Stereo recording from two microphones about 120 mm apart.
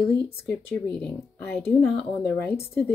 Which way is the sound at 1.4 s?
20° left (ahead or behind).